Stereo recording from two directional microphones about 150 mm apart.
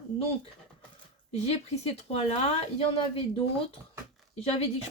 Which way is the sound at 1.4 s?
45° left (ahead or behind).